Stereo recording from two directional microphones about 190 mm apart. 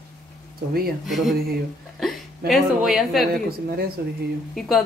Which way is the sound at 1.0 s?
Centre (ahead or behind).